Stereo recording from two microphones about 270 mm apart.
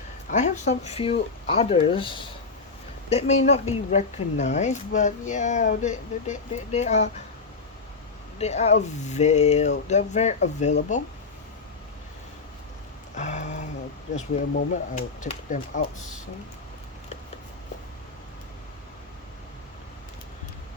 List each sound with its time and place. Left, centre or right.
0.3 s speech: left
8.4 s speech: left
13.1 s a sound: left
14.2 s speech: left